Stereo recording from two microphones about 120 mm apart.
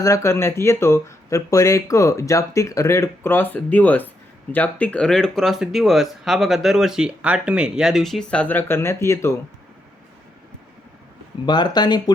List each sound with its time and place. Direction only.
0.0 s speech: 25° left (ahead or behind)
11.4 s speech: 35° left (ahead or behind)